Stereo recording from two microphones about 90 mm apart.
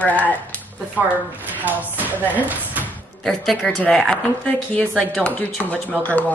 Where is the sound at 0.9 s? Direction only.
20° right (ahead or behind).